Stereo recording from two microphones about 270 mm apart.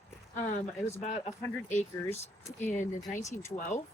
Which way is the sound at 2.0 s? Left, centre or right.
Centre.